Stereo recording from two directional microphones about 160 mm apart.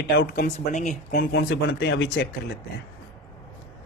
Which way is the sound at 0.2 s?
55° left (ahead or behind).